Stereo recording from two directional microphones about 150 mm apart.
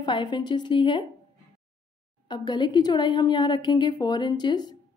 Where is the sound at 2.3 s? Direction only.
30° left (ahead or behind).